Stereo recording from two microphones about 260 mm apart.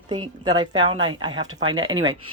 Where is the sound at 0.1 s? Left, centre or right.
Centre.